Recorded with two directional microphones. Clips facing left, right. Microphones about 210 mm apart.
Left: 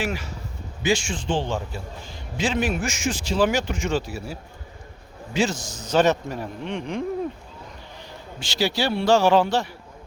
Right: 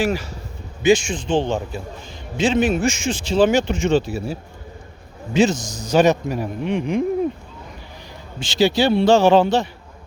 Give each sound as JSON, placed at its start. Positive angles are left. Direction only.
{"t": 0.0, "sound": "speech", "side_deg": -35}
{"t": 0.8, "sound": "a man's voice", "side_deg": -20}
{"t": 8.4, "sound": "a man's voice", "side_deg": -20}